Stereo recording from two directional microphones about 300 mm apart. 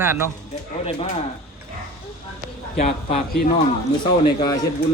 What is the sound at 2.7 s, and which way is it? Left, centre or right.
Speech, left.